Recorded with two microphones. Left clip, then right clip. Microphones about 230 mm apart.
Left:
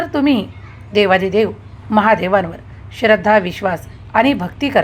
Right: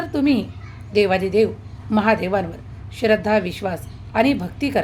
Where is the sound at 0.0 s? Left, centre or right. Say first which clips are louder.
Left 4 dB; centre.